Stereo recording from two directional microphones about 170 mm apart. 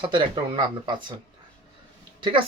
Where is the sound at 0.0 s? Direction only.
30° right (ahead or behind).